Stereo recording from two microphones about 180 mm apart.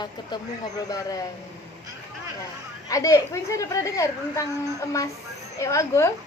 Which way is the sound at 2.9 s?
20° left (ahead or behind).